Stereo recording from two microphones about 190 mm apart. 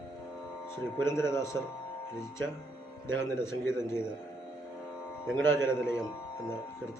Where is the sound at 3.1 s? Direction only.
15° left (ahead or behind).